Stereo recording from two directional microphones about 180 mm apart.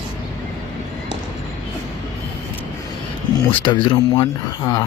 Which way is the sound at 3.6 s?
25° left (ahead or behind).